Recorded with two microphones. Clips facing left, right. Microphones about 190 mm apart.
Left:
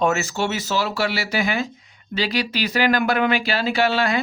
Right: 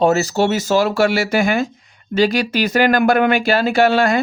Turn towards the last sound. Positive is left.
turn(degrees=-45)  # may be behind; listen again after turning